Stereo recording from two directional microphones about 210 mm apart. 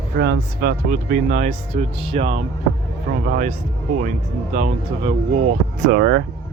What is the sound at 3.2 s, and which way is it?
Speech, 45° right (ahead or behind).